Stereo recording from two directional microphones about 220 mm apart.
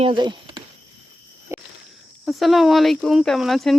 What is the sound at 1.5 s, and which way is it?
Cricket, 10° right (ahead or behind).